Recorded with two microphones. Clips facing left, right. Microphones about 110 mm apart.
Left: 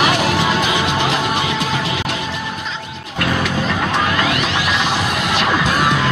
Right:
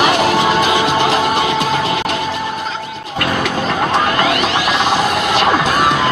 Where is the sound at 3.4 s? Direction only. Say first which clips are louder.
Right 2 dB; 40° right (ahead or behind).